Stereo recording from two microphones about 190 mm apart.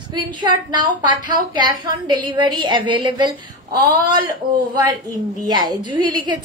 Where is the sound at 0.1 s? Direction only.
25° right (ahead or behind).